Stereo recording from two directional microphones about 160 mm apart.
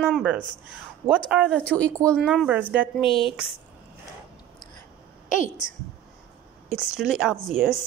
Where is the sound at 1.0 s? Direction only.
5° right (ahead or behind).